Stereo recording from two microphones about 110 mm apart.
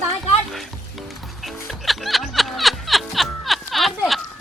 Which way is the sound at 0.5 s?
Centre (ahead or behind).